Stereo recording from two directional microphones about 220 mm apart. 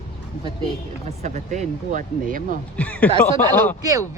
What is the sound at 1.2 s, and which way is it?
Speech, 30° right (ahead or behind).